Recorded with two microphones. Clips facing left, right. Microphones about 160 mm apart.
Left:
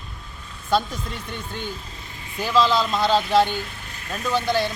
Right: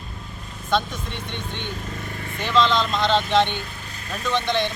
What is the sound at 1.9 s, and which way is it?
Vehicle, 60° right (ahead or behind).